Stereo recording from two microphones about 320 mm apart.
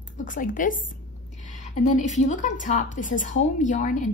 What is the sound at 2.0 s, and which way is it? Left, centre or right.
A woman's voice, left.